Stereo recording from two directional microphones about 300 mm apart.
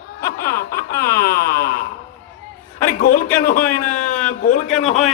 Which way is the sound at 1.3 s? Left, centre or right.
Left.